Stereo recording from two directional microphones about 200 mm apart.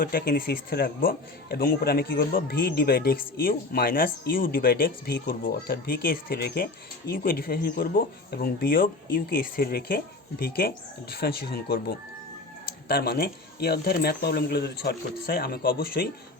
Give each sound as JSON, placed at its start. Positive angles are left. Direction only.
{"t": 0.0, "sound": "a man's voice", "side_deg": 50}